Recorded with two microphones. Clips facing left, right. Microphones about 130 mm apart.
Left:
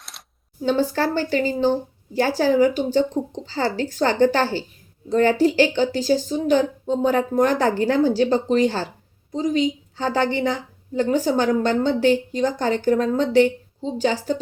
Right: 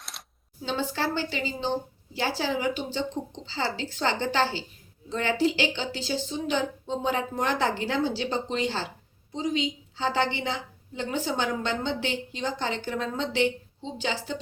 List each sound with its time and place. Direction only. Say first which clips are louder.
0.6 s a woman's voice: left 9 dB; 45° left (ahead or behind)